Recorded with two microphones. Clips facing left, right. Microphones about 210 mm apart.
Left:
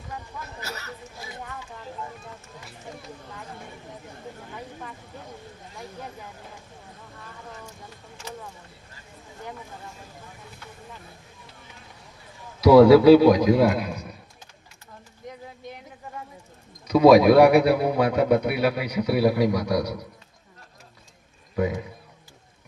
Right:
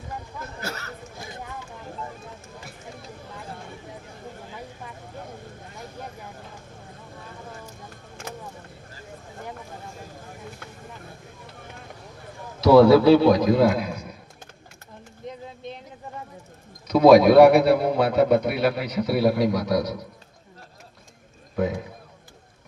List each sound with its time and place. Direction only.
0.6 s chatter: 50° right (ahead or behind)
12.6 s a man's voice: 10° left (ahead or behind)
16.9 s a man's voice: 10° left (ahead or behind)
21.5 s a man's voice: 5° left (ahead or behind)